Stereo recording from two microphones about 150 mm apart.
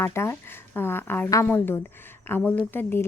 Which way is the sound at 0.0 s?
15° left (ahead or behind).